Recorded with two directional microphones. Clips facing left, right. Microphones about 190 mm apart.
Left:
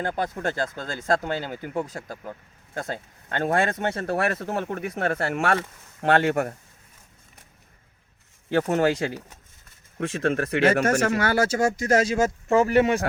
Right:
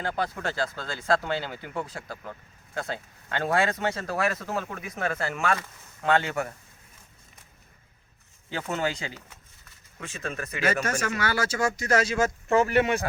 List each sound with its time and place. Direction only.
0.4 s speech: 45° left (ahead or behind)
2.7 s speech: 45° left (ahead or behind)
8.6 s speech: 45° left (ahead or behind)
10.0 s speech: 70° left (ahead or behind); by 13.0 s 35° left (ahead or behind)